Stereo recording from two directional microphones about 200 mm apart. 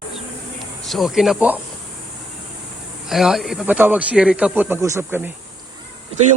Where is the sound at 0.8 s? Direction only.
Centre (ahead or behind).